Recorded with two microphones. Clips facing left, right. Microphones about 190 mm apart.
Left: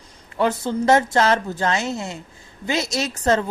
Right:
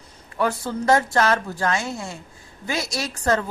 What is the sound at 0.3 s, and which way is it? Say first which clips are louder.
A woman's voice: left 3 dB; 20° left (ahead or behind).